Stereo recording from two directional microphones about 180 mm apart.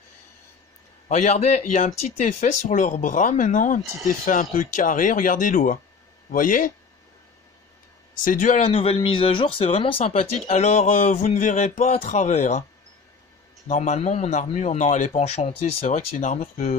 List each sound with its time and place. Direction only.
1.0 s a man's voice: 40° left (ahead or behind)
8.2 s speech: 45° left (ahead or behind)
13.7 s speech: 40° left (ahead or behind)